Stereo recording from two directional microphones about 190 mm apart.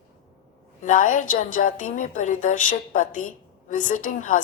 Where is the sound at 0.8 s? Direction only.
45° left (ahead or behind).